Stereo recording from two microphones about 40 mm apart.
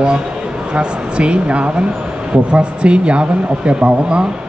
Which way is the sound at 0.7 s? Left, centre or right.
Right.